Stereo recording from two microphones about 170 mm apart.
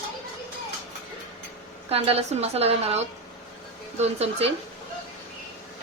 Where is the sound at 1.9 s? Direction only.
35° right (ahead or behind).